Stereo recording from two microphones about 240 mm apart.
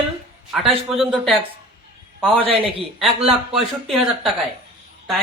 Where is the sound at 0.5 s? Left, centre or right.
Centre.